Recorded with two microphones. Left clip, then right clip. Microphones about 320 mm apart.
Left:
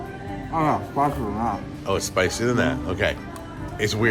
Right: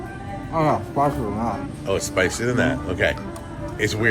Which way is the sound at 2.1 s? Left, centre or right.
Centre.